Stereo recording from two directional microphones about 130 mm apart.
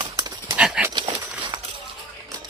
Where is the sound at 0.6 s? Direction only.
10° right (ahead or behind).